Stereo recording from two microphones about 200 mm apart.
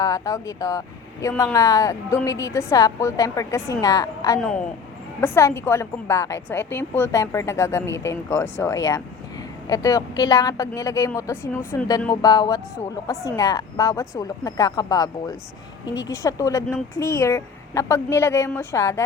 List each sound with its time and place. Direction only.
0.0 s a woman's voice: 20° left (ahead or behind)
4.4 s a woman's voice: 5° left (ahead or behind)